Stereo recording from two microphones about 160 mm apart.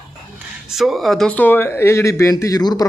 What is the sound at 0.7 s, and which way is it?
Speech, centre (ahead or behind).